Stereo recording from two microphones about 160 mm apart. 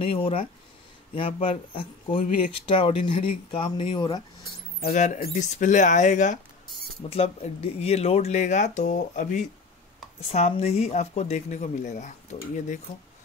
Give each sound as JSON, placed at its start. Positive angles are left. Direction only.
{"t": 0.0, "sound": "speech", "side_deg": 35}
{"t": 4.8, "sound": "speech", "side_deg": 50}
{"t": 7.0, "sound": "speech", "side_deg": 40}